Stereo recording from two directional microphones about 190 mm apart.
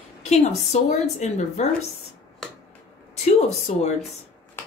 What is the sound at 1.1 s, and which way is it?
Speech, 35° left (ahead or behind).